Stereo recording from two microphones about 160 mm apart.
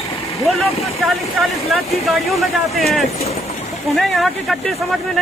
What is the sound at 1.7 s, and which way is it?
Speech, centre (ahead or behind).